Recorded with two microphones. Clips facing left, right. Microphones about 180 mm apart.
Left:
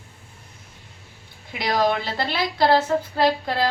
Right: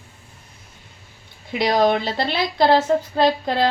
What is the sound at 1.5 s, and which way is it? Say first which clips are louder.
A woman's voice: right 4 dB; 25° right (ahead or behind).